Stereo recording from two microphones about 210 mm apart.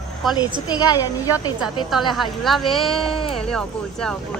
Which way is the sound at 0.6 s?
15° left (ahead or behind).